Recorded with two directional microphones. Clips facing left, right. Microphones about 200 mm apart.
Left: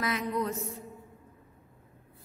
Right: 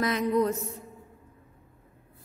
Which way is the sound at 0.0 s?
40° right (ahead or behind).